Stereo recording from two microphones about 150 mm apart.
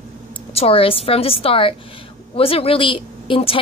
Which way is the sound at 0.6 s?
40° left (ahead or behind).